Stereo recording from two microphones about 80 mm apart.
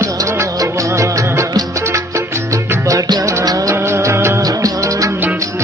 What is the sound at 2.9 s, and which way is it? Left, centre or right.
Music, right.